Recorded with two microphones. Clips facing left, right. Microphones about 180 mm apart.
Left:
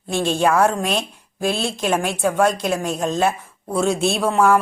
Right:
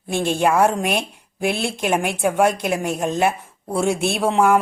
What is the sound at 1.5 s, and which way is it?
Speech, 55° right (ahead or behind).